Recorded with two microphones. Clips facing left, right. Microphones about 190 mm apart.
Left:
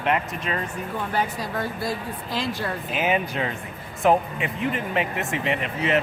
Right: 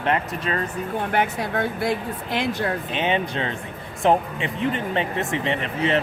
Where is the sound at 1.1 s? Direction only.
60° right (ahead or behind).